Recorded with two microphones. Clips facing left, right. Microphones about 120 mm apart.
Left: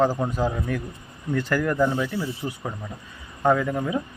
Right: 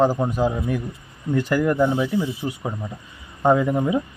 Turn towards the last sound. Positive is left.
turn(degrees=-15)  # may be behind; listen again after turning